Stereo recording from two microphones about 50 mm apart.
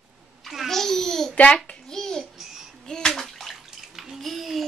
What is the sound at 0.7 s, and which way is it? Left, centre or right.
Babbling, centre.